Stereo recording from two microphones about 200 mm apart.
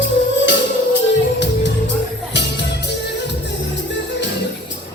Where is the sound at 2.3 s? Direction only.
60° left (ahead or behind).